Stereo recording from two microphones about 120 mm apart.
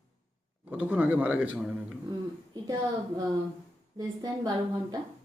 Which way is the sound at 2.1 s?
35° right (ahead or behind).